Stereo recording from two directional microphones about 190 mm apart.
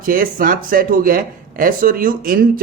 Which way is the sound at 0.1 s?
50° right (ahead or behind).